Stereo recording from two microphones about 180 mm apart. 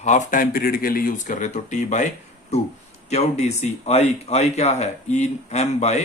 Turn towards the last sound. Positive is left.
turn(degrees=40)  # may be behind; listen again after turning